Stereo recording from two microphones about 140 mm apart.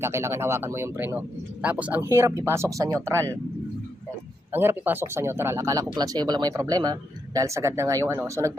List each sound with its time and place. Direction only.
0.0 s speech: 20° right (ahead or behind)
4.5 s speech: 15° right (ahead or behind)